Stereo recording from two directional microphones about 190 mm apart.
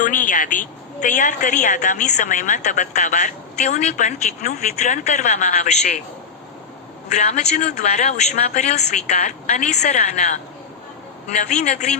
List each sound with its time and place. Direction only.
0.0 s a woman's voice: 45° left (ahead or behind)
7.1 s a woman's voice: 35° left (ahead or behind)
11.3 s a woman's voice: 40° left (ahead or behind)